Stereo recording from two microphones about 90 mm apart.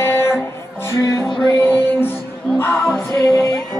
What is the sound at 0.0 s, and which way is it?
Music, 30° left (ahead or behind).